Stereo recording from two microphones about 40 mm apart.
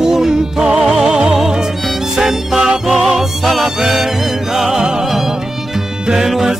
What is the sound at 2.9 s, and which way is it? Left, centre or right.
Music, centre.